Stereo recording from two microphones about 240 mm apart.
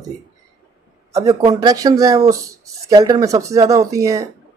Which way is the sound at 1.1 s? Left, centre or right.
Centre.